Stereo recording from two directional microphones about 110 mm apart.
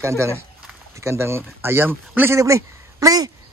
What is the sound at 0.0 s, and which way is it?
A man's voice, 25° right (ahead or behind).